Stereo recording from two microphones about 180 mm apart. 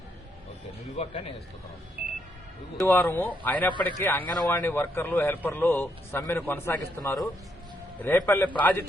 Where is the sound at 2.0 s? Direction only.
55° right (ahead or behind).